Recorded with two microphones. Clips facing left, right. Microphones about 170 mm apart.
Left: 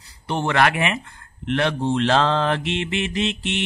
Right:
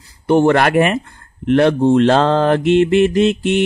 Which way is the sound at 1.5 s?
45° right (ahead or behind).